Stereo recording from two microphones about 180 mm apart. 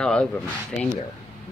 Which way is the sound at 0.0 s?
5° left (ahead or behind).